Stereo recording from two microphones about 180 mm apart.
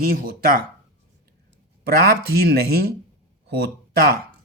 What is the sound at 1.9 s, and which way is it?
Speech, 60° right (ahead or behind).